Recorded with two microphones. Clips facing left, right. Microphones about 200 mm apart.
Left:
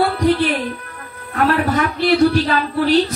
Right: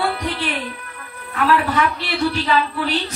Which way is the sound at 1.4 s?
40° left (ahead or behind).